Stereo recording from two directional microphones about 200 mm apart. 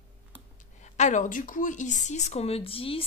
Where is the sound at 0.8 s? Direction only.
35° left (ahead or behind).